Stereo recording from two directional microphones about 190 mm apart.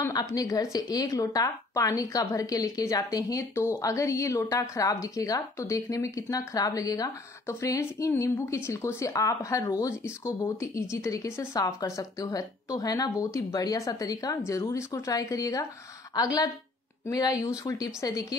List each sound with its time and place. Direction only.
0.0 s a woman's voice: 20° left (ahead or behind)